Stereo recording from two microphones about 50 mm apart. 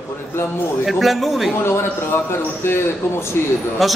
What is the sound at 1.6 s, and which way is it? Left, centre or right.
A man's voice, left.